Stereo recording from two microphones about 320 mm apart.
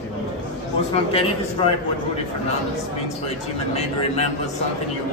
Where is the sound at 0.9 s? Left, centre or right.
Centre.